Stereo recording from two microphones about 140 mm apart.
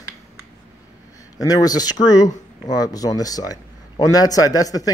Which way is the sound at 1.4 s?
25° left (ahead or behind).